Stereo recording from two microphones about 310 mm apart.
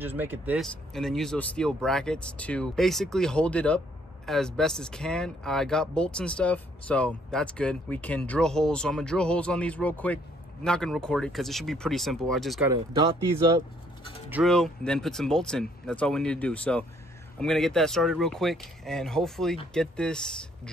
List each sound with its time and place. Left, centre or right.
0.0 s speech: centre
14.3 s speech: centre